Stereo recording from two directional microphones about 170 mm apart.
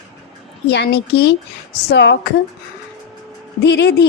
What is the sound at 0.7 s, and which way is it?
Speech, 80° left.